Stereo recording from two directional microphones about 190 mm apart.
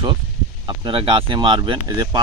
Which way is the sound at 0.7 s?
25° right (ahead or behind).